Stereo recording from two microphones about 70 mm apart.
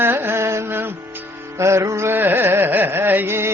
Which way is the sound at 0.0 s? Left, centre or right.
Right.